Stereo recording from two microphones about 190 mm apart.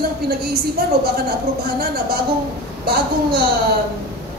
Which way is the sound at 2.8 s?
55° right (ahead or behind).